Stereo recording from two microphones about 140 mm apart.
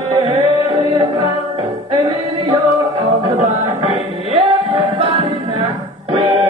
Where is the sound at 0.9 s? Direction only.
35° right (ahead or behind).